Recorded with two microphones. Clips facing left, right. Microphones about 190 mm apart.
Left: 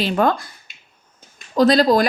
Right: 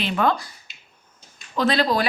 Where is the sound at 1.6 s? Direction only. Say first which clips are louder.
Left 7 dB; 40° left (ahead or behind).